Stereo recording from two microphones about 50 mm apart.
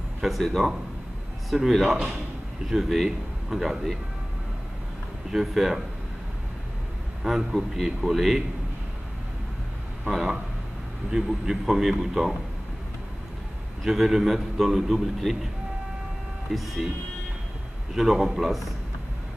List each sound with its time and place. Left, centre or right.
0.4 s a man's voice: centre
5.3 s a man's voice: centre
7.2 s a man's voice: centre
11.1 s a man's voice: centre
13.8 s a man's voice: centre
16.5 s a man's voice: centre
17.9 s a man's voice: centre